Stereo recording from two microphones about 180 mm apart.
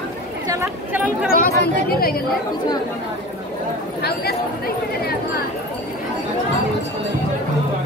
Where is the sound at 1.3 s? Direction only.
55° left (ahead or behind).